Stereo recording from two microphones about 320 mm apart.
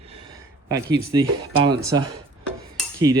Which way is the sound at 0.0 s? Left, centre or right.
Centre.